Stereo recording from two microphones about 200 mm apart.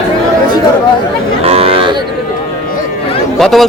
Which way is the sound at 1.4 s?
30° right (ahead or behind).